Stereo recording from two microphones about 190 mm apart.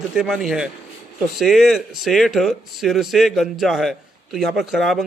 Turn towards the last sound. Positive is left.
turn(degrees=0)  # may be behind; listen again after turning